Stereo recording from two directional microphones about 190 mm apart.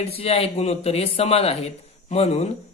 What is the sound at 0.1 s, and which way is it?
Speech, 30° left (ahead or behind).